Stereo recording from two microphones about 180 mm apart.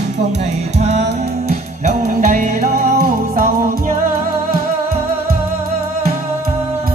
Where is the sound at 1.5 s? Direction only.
40° right (ahead or behind).